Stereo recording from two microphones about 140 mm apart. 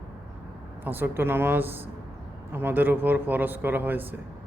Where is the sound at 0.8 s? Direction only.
15° right (ahead or behind).